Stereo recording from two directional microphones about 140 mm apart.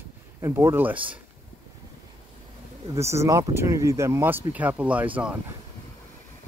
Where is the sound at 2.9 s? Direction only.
20° right (ahead or behind).